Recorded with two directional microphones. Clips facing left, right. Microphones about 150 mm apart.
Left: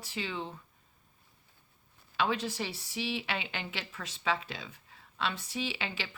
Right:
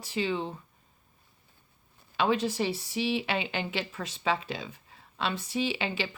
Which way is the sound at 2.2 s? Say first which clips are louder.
Right 5 dB; 20° right (ahead or behind).